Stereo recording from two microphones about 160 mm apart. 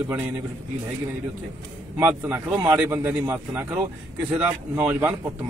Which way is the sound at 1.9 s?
10° right (ahead or behind).